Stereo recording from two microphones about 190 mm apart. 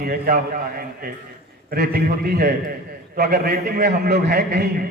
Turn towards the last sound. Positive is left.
turn(degrees=-55)  # may be behind; listen again after turning